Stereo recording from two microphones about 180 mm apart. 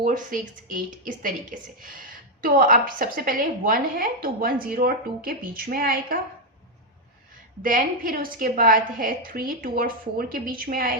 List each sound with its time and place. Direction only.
0.0 s a woman's voice: 45° right (ahead or behind)
7.6 s a woman's voice: 50° right (ahead or behind)